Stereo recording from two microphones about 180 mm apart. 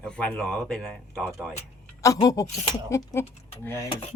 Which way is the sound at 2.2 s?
20° left (ahead or behind).